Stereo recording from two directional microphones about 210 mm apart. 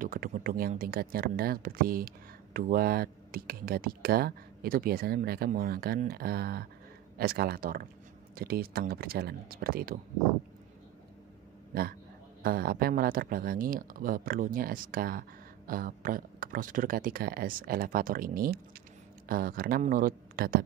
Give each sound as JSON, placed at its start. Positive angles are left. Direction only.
{"t": 0.0, "sound": "speech", "side_deg": -40}
{"t": 11.7, "sound": "speech", "side_deg": -45}